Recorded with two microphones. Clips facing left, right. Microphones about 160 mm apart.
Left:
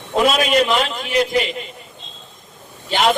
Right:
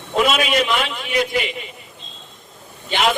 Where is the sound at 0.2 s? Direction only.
40° left (ahead or behind).